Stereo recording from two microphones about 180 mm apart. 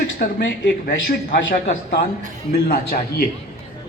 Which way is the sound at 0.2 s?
75° left (ahead or behind).